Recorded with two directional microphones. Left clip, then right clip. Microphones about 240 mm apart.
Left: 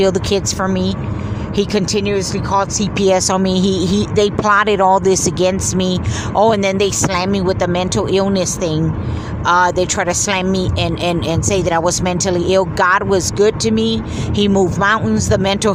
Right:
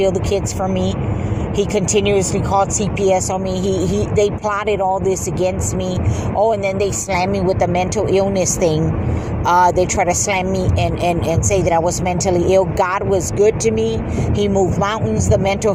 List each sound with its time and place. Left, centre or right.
0.0 s speech: centre
1.5 s speech: centre